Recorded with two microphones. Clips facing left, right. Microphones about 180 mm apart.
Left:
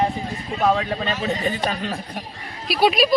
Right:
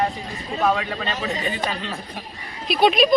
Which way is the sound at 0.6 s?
30° left (ahead or behind).